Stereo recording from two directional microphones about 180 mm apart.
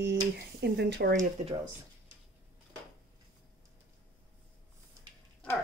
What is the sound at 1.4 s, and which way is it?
Speech, 40° right (ahead or behind).